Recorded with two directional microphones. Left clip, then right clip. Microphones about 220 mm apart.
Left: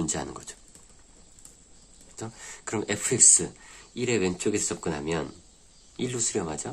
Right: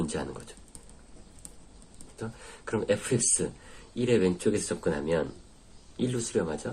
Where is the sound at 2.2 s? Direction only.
45° left (ahead or behind).